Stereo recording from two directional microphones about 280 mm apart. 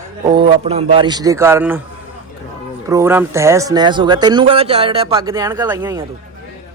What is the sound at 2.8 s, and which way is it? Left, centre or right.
Speech, centre.